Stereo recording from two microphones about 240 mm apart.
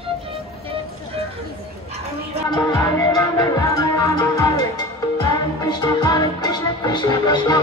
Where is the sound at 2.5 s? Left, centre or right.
Centre.